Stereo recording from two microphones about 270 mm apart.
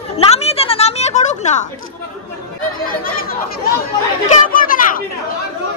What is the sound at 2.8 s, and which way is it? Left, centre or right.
Chatter, left.